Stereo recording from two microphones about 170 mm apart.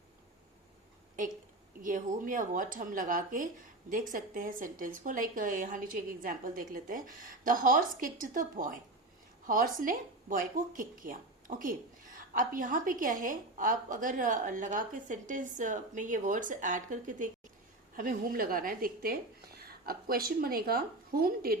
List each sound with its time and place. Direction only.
1.8 s a woman's voice: 50° right (ahead or behind)